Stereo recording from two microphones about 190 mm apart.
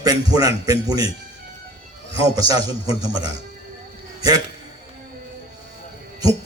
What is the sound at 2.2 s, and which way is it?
A man's voice, 20° right (ahead or behind).